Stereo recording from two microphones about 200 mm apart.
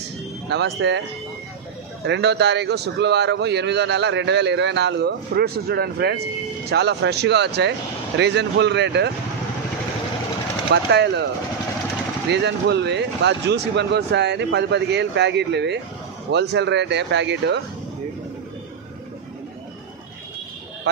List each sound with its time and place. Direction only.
0.5 s a man's voice: 60° right (ahead or behind)
2.0 s a man's voice: 60° right (ahead or behind)
10.7 s a man's voice: 60° right (ahead or behind)
12.3 s a man's voice: 60° right (ahead or behind)